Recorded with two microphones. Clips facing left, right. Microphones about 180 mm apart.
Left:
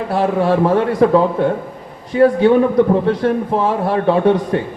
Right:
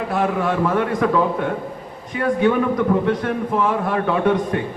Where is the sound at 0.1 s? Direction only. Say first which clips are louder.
Left 6 dB; 35° left (ahead or behind).